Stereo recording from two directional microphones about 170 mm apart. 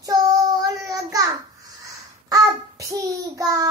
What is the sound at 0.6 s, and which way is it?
Child singing, 20° right (ahead or behind).